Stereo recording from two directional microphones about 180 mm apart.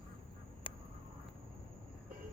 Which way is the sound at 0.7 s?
30° left (ahead or behind).